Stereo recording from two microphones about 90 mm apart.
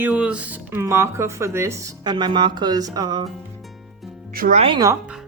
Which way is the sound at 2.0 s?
55° right (ahead or behind).